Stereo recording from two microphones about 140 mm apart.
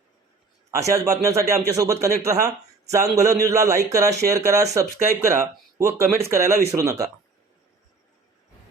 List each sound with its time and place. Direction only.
0.7 s a man's voice: 20° right (ahead or behind)